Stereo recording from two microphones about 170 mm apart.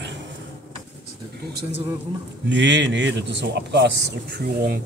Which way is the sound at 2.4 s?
90° right.